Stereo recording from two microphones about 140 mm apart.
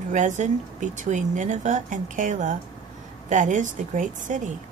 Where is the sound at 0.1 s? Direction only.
60° right (ahead or behind).